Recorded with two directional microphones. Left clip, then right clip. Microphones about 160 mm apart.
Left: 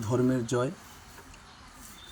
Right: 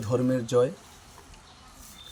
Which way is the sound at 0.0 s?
15° right (ahead or behind).